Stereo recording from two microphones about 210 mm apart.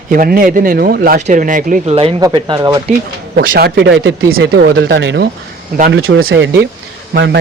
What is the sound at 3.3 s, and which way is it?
Speech, 50° right (ahead or behind).